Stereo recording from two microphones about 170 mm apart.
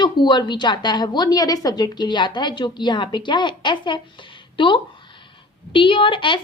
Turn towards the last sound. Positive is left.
turn(degrees=30)  # may be behind; listen again after turning